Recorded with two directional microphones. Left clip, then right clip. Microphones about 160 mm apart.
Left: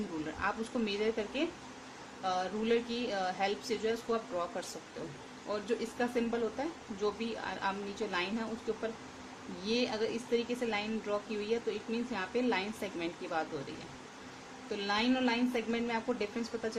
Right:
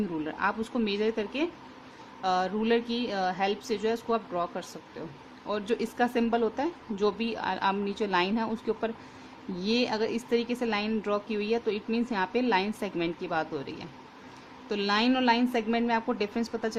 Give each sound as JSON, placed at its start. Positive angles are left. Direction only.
{"t": 0.4, "sound": "speech", "side_deg": -45}
{"t": 14.7, "sound": "speech", "side_deg": -55}